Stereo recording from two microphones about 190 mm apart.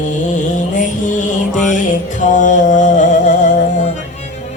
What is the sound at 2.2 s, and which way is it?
Mantra, 40° left (ahead or behind).